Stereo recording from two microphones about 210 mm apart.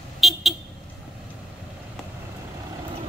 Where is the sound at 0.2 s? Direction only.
Centre (ahead or behind).